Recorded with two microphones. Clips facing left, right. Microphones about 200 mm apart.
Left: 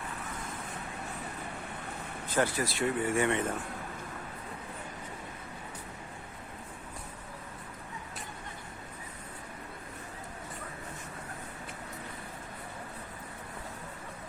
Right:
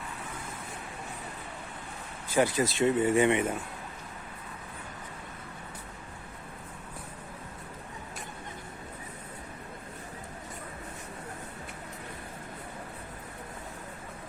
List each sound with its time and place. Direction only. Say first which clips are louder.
2.2 s vehicle: right 4 dB; 10° right (ahead or behind)
2.6 s speech: right 5 dB; 20° right (ahead or behind)